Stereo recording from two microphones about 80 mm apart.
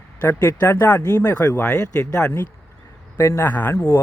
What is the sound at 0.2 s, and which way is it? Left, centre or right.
Speech, left.